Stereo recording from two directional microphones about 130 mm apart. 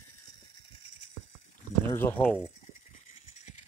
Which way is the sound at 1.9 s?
15° left (ahead or behind).